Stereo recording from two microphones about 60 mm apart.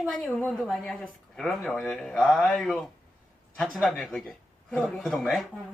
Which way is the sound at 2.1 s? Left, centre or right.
Centre.